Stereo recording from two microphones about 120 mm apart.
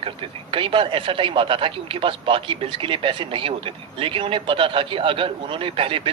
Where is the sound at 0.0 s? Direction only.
45° right (ahead or behind).